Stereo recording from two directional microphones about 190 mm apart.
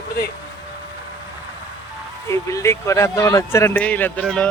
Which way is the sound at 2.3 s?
15° left (ahead or behind).